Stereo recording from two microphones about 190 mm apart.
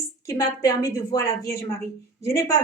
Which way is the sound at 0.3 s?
20° left (ahead or behind).